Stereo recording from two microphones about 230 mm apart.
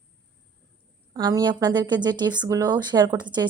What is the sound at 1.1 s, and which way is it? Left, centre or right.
A woman's voice, centre.